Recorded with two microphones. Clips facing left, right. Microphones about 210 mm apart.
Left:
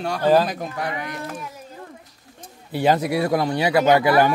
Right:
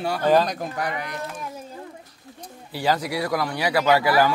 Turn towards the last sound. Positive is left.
turn(degrees=20)  # may be behind; listen again after turning